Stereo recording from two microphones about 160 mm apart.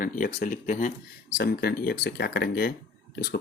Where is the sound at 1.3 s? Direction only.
75° left (ahead or behind).